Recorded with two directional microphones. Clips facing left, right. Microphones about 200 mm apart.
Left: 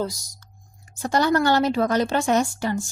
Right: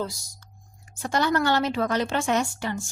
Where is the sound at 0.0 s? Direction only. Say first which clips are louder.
Left 4 dB; 40° left (ahead or behind).